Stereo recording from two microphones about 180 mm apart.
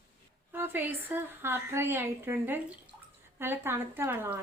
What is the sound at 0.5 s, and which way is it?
A woman's voice, 10° right (ahead or behind).